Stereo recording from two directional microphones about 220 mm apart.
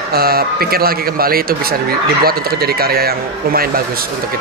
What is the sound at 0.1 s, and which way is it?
A man's voice, 45° right (ahead or behind).